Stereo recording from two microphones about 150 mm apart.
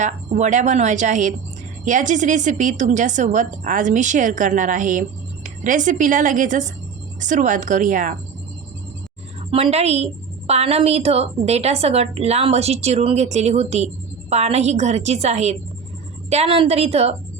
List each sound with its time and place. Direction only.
0.0 s a woman's voice: 55° right (ahead or behind)
9.5 s a woman's voice: 40° right (ahead or behind)